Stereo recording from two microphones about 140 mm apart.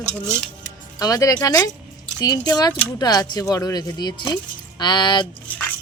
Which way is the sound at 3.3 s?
25° left (ahead or behind).